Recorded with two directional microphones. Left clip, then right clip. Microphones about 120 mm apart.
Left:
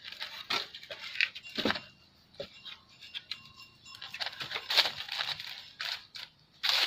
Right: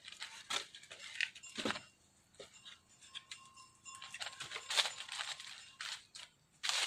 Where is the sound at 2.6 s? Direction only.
40° left (ahead or behind).